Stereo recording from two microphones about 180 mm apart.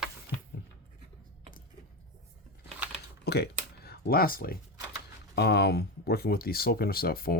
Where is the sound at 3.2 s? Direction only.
65° left (ahead or behind).